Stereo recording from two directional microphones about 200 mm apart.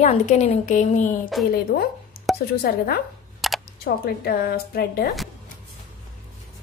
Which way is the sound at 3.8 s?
50° left (ahead or behind).